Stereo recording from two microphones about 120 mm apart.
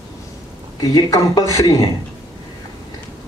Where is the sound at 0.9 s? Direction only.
30° left (ahead or behind).